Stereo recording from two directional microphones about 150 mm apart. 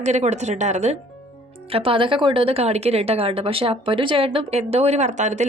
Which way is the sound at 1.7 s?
35° right (ahead or behind).